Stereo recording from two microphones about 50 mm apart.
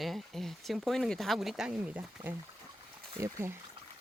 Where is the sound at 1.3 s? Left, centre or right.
Centre.